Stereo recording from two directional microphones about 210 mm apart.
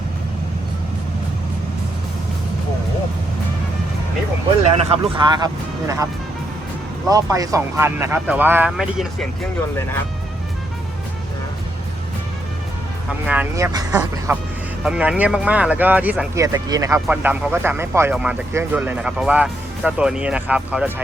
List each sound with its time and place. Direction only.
4.9 s speech: 20° right (ahead or behind)
7.1 s speech: 15° right (ahead or behind)
13.2 s speech: 5° right (ahead or behind)